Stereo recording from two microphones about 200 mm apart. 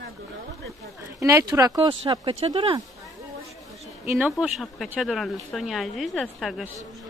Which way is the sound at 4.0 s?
5° right (ahead or behind).